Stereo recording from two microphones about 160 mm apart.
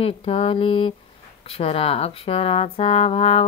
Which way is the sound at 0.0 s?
35° left (ahead or behind).